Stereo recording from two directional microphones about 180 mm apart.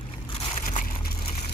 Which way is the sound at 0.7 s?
50° left (ahead or behind).